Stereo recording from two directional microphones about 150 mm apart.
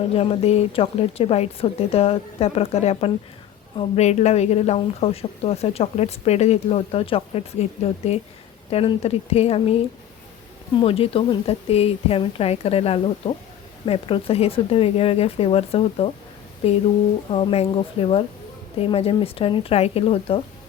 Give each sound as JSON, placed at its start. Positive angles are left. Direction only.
{"t": 0.1, "sound": "a woman's voice", "side_deg": 40}